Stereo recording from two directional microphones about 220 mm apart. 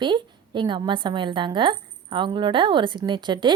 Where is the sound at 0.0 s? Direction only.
20° right (ahead or behind).